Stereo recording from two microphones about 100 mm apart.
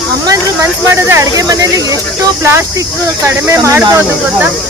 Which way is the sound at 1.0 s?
30° right (ahead or behind).